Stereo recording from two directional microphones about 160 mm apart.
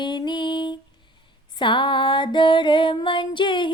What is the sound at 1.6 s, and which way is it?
Music, 30° left (ahead or behind).